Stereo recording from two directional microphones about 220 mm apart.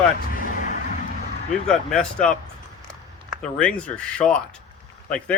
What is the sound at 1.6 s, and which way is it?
Speech, 5° left (ahead or behind).